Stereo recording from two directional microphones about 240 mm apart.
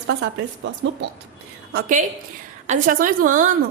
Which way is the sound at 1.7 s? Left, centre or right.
Right.